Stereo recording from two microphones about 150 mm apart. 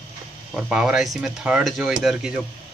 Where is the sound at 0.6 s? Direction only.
5° right (ahead or behind).